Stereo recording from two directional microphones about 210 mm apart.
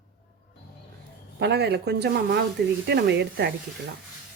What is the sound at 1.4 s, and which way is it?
Speech, 50° right (ahead or behind).